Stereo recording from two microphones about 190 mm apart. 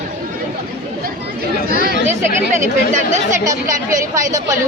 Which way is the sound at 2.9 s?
40° right (ahead or behind).